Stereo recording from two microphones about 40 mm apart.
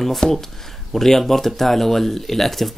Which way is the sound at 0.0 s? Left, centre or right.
Centre.